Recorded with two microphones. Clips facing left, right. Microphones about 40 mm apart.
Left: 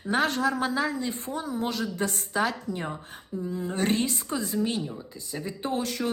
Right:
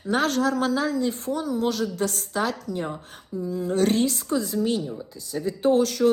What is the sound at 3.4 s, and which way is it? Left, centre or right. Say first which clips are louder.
Speech: right 4 dB; left.